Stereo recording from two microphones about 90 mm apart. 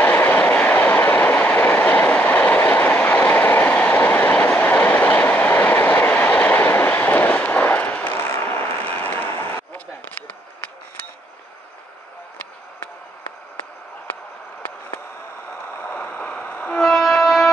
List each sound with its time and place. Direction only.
0.0 s train: 20° left (ahead or behind)
15.8 s a sound: 20° left (ahead or behind)
16.8 s music: 5° left (ahead or behind)